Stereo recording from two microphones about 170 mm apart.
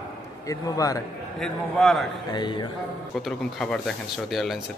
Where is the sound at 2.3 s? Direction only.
25° left (ahead or behind).